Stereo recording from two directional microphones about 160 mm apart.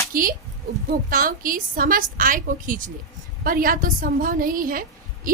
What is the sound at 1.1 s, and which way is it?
A woman's voice, 60° right (ahead or behind).